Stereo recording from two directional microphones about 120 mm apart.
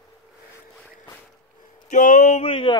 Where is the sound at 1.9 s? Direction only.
90° left.